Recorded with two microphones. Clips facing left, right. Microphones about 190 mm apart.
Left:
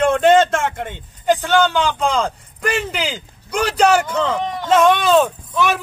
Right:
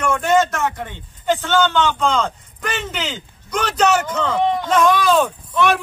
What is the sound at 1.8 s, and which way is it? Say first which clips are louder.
Speech: even; 35° left (ahead or behind).